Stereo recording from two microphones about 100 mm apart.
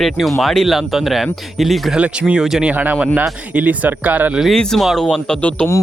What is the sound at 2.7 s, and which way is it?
Speech, 15° right (ahead or behind).